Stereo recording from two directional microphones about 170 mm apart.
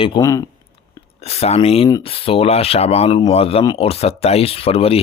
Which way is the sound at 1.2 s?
35° left (ahead or behind).